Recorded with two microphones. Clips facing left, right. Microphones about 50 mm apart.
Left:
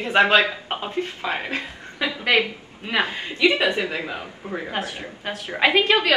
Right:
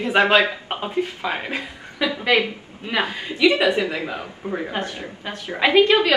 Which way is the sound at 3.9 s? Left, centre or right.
Centre.